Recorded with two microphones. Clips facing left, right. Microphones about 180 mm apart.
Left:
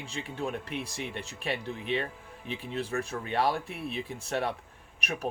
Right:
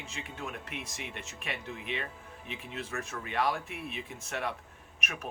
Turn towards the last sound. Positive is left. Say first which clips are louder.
# left 6 dB
turn(degrees=35)  # may be behind; listen again after turning